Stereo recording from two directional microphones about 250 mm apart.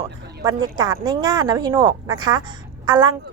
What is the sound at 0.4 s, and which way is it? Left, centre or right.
A woman's voice, centre.